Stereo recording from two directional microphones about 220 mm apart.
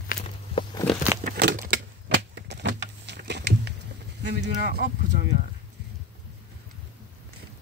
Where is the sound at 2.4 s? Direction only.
50° right (ahead or behind).